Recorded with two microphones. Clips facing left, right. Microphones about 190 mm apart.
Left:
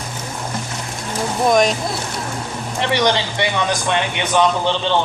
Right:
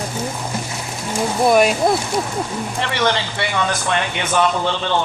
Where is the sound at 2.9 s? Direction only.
15° left (ahead or behind).